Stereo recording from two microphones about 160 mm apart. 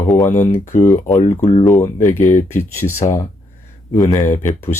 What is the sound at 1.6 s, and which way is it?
Speech, 20° left (ahead or behind).